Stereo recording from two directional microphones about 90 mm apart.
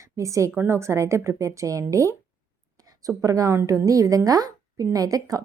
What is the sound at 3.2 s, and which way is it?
Speech, 40° right (ahead or behind).